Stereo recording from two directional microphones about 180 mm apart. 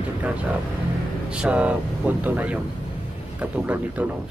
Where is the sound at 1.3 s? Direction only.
5° right (ahead or behind).